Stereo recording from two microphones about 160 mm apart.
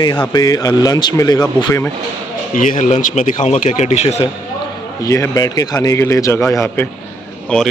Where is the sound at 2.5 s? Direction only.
50° left (ahead or behind).